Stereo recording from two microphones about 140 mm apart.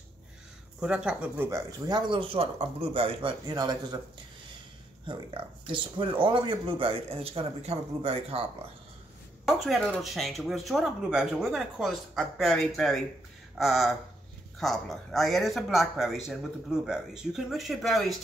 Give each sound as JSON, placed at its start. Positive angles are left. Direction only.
{"t": 0.7, "sound": "speech", "side_deg": -10}
{"t": 1.9, "sound": "speech", "side_deg": -35}
{"t": 5.0, "sound": "speech", "side_deg": -35}
{"t": 9.5, "sound": "speech", "side_deg": 0}